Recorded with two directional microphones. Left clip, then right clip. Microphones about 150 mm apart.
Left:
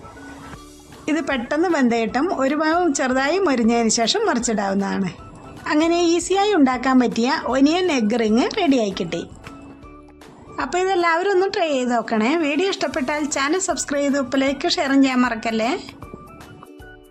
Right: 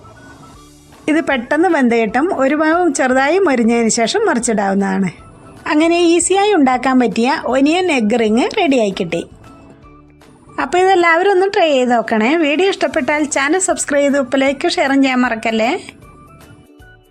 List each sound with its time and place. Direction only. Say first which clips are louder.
1.0 s a woman's voice: right 7 dB; 35° right (ahead or behind)
10.6 s a woman's voice: right 8 dB; 35° right (ahead or behind)